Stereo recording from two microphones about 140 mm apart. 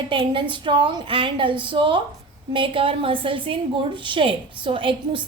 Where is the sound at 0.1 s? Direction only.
35° right (ahead or behind).